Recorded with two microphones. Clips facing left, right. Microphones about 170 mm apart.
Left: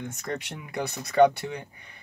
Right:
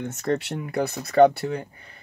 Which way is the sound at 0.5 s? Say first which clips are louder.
Right 6 dB; 55° right (ahead or behind).